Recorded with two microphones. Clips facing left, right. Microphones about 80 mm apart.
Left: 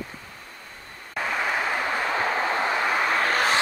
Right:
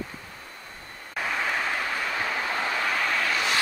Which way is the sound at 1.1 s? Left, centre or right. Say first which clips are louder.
Left 2 dB; centre.